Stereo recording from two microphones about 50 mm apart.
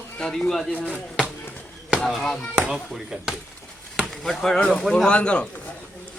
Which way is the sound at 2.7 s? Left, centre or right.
Centre.